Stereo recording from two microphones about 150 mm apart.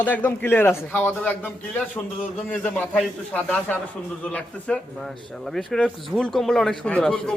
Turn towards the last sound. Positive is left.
turn(degrees=5)  # may be behind; listen again after turning